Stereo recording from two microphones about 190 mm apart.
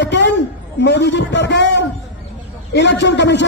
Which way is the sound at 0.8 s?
65° left (ahead or behind).